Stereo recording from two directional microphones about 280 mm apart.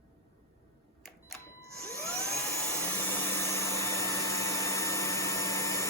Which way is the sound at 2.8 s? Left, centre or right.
Centre.